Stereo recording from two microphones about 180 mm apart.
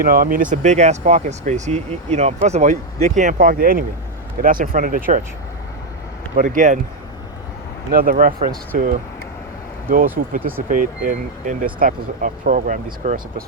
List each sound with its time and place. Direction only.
0.0 s speech: 50° right (ahead or behind)
6.3 s speech: 45° right (ahead or behind)
7.9 s speech: 50° right (ahead or behind)
9.9 s speech: 50° right (ahead or behind)